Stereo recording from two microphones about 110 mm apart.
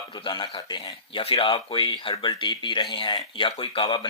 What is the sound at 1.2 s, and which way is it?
Speech, 55° left (ahead or behind).